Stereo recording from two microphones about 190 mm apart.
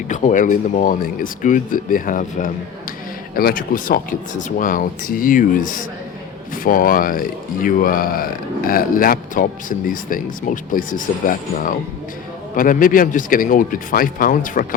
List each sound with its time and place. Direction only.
0.1 s speech: 40° left (ahead or behind)
6.7 s speech: 50° left (ahead or behind)